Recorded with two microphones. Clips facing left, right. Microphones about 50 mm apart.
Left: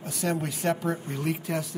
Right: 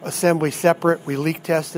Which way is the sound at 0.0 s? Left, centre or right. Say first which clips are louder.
Right 11 dB; right.